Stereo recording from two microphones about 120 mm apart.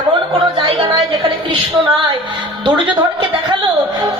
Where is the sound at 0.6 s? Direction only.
50° right (ahead or behind).